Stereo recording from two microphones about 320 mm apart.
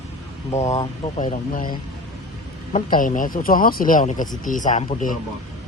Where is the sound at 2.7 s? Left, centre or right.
Left.